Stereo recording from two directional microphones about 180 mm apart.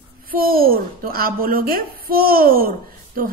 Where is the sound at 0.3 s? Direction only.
55° right (ahead or behind).